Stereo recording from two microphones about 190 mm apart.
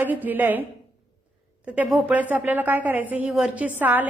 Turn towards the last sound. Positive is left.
turn(degrees=-10)  # may be behind; listen again after turning